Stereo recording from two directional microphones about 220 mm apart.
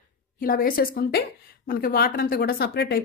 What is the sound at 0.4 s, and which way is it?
A woman's voice, 40° left (ahead or behind).